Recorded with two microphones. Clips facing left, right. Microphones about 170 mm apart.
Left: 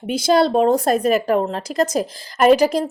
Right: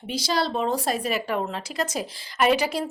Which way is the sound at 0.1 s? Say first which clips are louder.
Left 10 dB; 50° left (ahead or behind).